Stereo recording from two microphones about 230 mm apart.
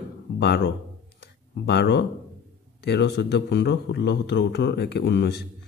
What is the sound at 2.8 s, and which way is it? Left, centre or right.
A man's voice, left.